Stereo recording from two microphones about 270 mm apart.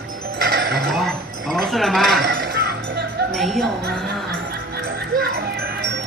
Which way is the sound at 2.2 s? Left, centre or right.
Right.